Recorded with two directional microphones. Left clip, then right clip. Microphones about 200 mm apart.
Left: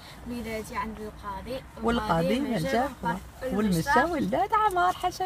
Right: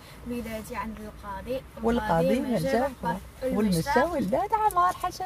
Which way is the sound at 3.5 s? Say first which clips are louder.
Left 1 dB; centre (ahead or behind).